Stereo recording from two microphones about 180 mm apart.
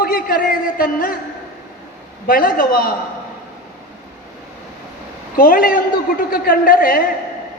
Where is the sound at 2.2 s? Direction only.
50° left (ahead or behind).